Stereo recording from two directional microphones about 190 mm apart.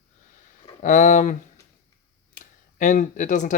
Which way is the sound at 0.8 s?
40° left (ahead or behind).